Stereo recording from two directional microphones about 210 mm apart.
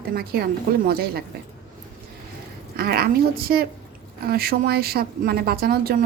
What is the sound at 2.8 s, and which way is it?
A woman's voice, 50° right (ahead or behind).